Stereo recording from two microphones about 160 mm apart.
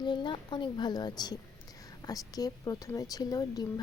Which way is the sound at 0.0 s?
30° left (ahead or behind).